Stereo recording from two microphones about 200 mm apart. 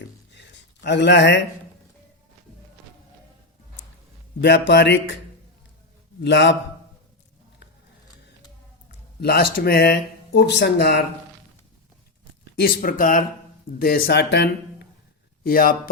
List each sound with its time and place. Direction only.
0.3 s a sound: 60° left (ahead or behind)
4.4 s speech: 60° left (ahead or behind)
6.2 s speech: 60° left (ahead or behind)
9.2 s speech: 50° left (ahead or behind)
12.5 s speech: 45° left (ahead or behind)